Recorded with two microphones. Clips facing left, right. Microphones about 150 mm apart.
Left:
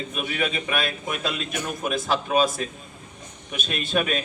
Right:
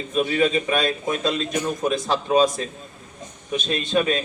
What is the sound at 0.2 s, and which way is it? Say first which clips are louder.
A man's voice: right 9 dB; 30° right (ahead or behind).